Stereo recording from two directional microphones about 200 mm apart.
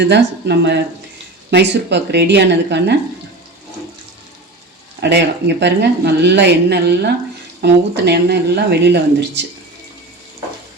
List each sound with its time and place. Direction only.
0.0 s a woman's voice: 60° right (ahead or behind)
4.9 s a woman's voice: 55° right (ahead or behind)